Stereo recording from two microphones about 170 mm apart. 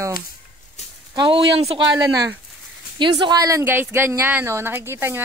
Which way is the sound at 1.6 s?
35° right (ahead or behind).